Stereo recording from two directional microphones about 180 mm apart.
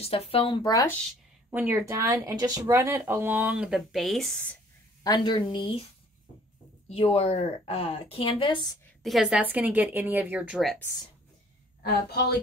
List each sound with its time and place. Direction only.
0.0 s speech: 35° left (ahead or behind)
1.5 s speech: 10° right (ahead or behind)
5.0 s speech: 25° left (ahead or behind)
6.9 s a woman's voice: 35° left (ahead or behind)
9.0 s speech: centre (ahead or behind)
11.8 s a woman's voice: 65° left (ahead or behind)